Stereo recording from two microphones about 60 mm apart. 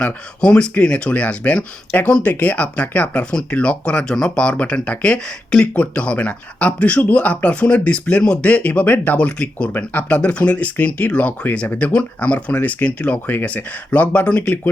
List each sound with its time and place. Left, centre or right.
0.0 s speech: centre